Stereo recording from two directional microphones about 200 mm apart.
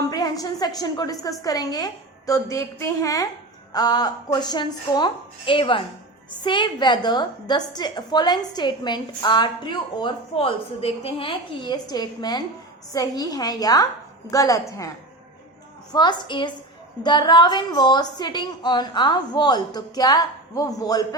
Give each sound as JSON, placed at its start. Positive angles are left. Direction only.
{"t": 0.0, "sound": "a woman's voice", "side_deg": 20}
{"t": 15.9, "sound": "a woman's voice", "side_deg": 20}